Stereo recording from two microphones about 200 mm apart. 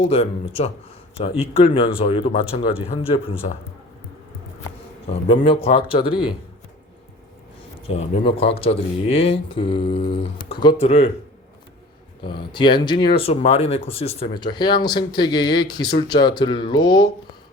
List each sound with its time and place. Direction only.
0.1 s speech: 30° left (ahead or behind)
5.6 s speech: 30° left (ahead or behind)
7.9 s speech: 30° left (ahead or behind)
12.2 s speech: 25° left (ahead or behind)